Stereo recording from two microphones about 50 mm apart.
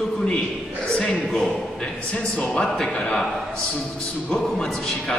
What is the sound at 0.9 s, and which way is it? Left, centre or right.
A man's voice, centre.